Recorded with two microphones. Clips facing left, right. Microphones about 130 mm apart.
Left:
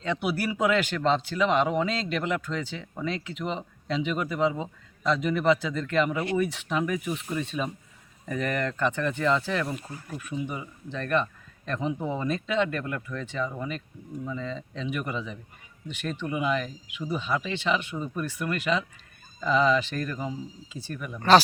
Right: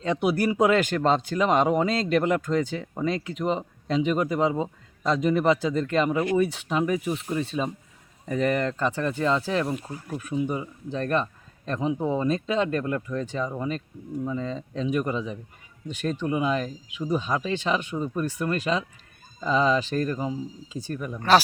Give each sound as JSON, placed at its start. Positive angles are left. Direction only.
{"t": 0.0, "sound": "speech", "side_deg": -40}
{"t": 9.6, "sound": "speech", "side_deg": -15}
{"t": 10.2, "sound": "speech", "side_deg": -35}
{"t": 14.3, "sound": "speech", "side_deg": -40}
{"t": 21.2, "sound": "speech", "side_deg": -5}